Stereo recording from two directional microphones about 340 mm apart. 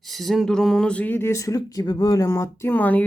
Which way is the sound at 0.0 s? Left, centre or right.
Centre.